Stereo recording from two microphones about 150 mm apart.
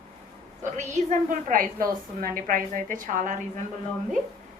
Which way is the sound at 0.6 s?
55° right (ahead or behind).